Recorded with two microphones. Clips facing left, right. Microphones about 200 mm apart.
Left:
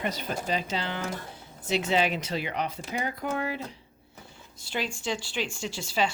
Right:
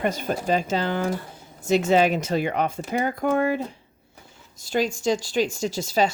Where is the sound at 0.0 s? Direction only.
50° right (ahead or behind).